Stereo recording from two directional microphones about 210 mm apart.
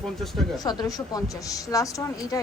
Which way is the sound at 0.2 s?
Centre (ahead or behind).